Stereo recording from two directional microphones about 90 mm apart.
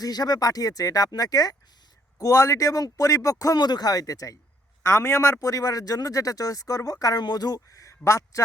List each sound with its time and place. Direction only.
0.0 s a man's voice: 50° left (ahead or behind)